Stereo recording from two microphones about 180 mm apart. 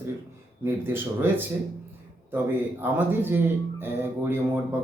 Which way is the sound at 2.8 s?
10° right (ahead or behind).